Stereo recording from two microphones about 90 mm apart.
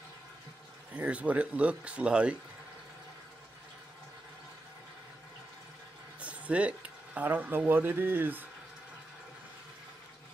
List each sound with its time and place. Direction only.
0.9 s speech: 15° right (ahead or behind)
6.1 s a sound: 15° right (ahead or behind)
7.2 s speech: 20° right (ahead or behind)